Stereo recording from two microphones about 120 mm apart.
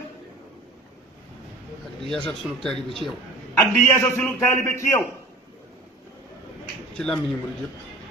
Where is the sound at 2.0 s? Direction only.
5° left (ahead or behind).